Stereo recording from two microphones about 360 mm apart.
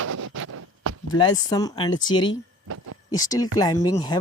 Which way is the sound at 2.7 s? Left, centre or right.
Right.